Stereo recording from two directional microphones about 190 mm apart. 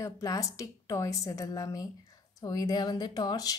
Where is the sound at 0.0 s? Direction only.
15° left (ahead or behind).